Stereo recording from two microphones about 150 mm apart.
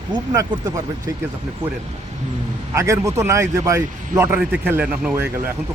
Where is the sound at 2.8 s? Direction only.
20° right (ahead or behind).